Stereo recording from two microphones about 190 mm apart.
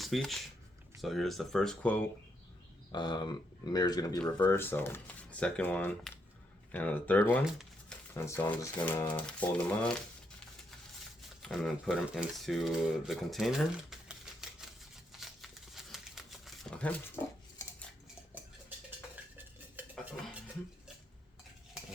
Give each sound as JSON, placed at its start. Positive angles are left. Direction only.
{"t": 0.0, "sound": "speech", "side_deg": 0}
{"t": 2.9, "sound": "speech", "side_deg": 25}
{"t": 7.4, "sound": "shuffling cards", "side_deg": 0}
{"t": 8.1, "sound": "speech", "side_deg": 15}
{"t": 11.4, "sound": "speech", "side_deg": 0}
{"t": 15.1, "sound": "crumpling", "side_deg": 0}
{"t": 19.8, "sound": "stir", "side_deg": -10}